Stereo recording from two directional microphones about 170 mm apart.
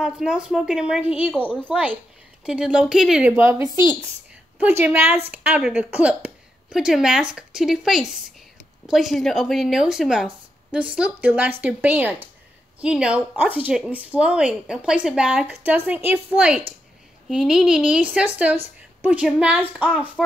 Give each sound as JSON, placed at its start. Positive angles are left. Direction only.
{"t": 0.0, "sound": "speech", "side_deg": -5}
{"t": 3.6, "sound": "speech", "side_deg": 25}
{"t": 4.6, "sound": "a woman's voice", "side_deg": -10}